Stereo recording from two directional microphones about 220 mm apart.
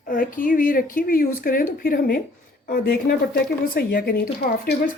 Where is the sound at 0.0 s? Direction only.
40° left (ahead or behind).